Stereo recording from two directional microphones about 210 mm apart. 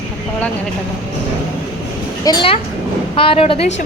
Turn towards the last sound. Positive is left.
turn(degrees=25)  # may be behind; listen again after turning